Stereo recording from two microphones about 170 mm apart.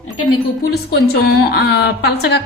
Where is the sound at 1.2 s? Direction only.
70° left (ahead or behind).